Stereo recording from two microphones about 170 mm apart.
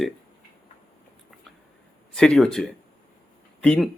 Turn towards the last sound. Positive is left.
turn(degrees=5)  # may be behind; listen again after turning